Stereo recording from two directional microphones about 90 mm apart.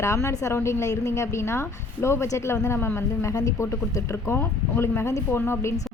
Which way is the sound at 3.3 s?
40° left (ahead or behind).